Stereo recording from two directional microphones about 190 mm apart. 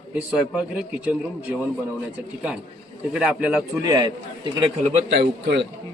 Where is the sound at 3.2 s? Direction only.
5° right (ahead or behind).